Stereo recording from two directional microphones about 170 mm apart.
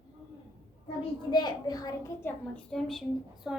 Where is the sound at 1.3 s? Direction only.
25° left (ahead or behind).